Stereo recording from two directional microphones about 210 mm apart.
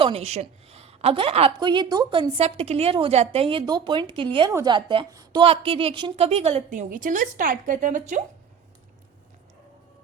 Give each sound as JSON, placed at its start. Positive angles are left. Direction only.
{"t": 0.0, "sound": "a woman's voice", "side_deg": -30}